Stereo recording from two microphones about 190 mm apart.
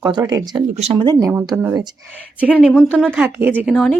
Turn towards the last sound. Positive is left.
turn(degrees=0)  # may be behind; listen again after turning